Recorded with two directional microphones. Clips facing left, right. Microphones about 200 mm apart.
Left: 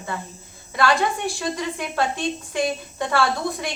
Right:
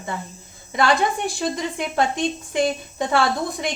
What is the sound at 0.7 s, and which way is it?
A woman's voice, 20° right (ahead or behind).